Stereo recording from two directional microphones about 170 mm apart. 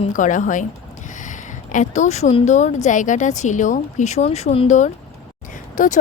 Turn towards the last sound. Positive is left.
turn(degrees=50)  # may be behind; listen again after turning